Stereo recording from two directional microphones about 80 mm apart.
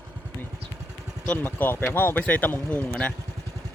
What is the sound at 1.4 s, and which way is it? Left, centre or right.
Speech, left.